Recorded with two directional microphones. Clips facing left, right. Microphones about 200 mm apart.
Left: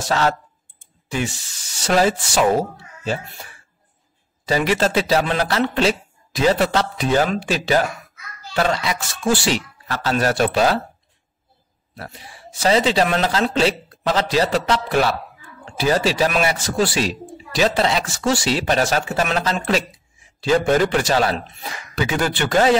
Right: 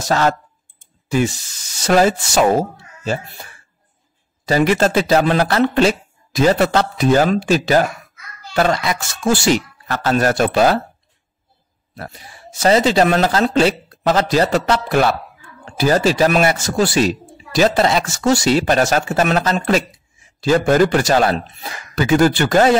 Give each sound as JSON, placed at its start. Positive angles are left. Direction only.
{"t": 1.1, "sound": "speech", "side_deg": -40}
{"t": 4.5, "sound": "a man's voice", "side_deg": -45}
{"t": 11.9, "sound": "a man's voice", "side_deg": -45}